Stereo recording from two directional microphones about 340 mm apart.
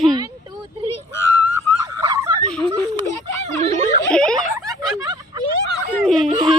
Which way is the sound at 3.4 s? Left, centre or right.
Centre.